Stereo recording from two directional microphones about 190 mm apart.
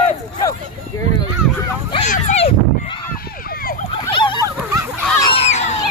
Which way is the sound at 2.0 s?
35° left (ahead or behind).